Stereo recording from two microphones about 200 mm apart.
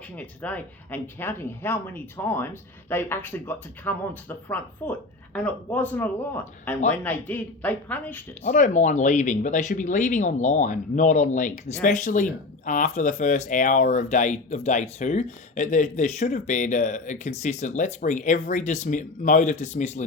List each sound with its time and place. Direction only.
0.2 s speech: 5° left (ahead or behind)
8.4 s speech: 40° left (ahead or behind)